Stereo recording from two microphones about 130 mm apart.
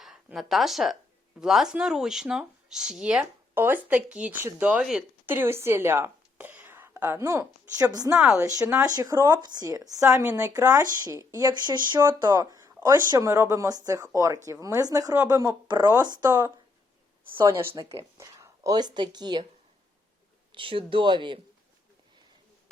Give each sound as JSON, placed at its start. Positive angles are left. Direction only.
{"t": 0.0, "sound": "speech", "side_deg": 0}
{"t": 5.2, "sound": "speech", "side_deg": -15}
{"t": 8.1, "sound": "speech", "side_deg": -5}
{"t": 8.4, "sound": "speech", "side_deg": -25}
{"t": 20.5, "sound": "speech", "side_deg": -40}